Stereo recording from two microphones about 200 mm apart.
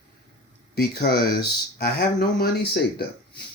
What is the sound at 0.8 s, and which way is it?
Speech, 50° left (ahead or behind).